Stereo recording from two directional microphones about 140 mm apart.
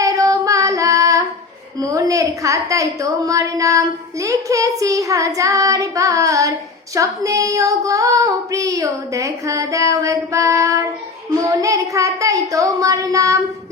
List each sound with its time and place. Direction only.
0.0 s female singing: 25° right (ahead or behind)
1.8 s a woman's voice: 25° right (ahead or behind)